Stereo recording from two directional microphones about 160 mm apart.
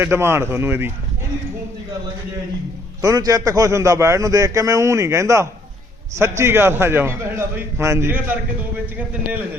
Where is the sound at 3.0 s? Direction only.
20° right (ahead or behind).